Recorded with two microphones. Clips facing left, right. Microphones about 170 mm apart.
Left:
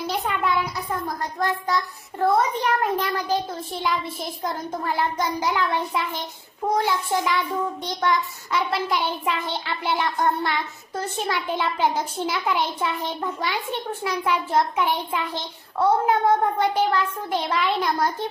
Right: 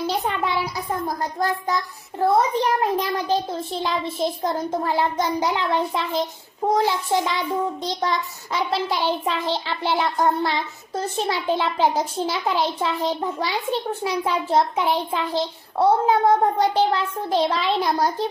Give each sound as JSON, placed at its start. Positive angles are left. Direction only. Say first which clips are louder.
{"t": 0.0, "sound": "a sound", "louder": "right 2 dB", "side_deg": -30}
{"t": 1.0, "sound": "a woman's voice", "louder": "right 2 dB", "side_deg": -35}
{"t": 6.8, "sound": "a child's voice", "louder": "right 2 dB", "side_deg": -25}